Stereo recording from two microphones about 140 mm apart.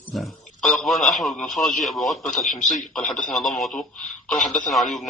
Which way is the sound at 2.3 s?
65° left (ahead or behind).